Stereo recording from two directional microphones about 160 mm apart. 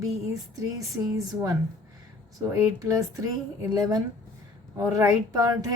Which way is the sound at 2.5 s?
20° right (ahead or behind).